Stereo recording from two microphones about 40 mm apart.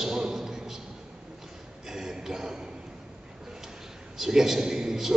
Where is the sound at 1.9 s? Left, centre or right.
Centre.